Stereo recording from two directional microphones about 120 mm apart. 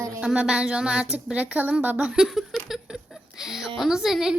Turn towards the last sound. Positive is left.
turn(degrees=-5)  # may be behind; listen again after turning